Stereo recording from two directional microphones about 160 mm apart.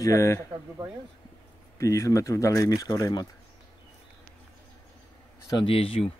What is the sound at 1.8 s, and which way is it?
Speech, 20° left (ahead or behind).